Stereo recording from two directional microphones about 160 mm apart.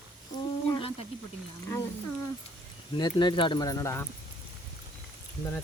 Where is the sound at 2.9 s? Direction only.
30° left (ahead or behind).